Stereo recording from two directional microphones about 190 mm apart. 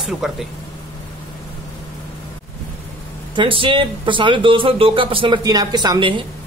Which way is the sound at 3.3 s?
25° right (ahead or behind).